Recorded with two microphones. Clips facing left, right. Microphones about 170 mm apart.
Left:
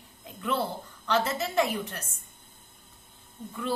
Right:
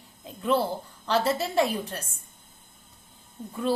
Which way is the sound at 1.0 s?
30° right (ahead or behind).